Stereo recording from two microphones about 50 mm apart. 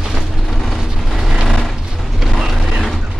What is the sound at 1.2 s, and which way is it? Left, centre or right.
Vehicle, centre.